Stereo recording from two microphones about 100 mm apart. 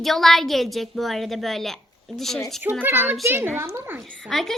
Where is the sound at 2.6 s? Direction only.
20° right (ahead or behind).